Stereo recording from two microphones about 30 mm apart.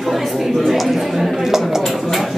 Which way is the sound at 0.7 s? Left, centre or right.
Centre.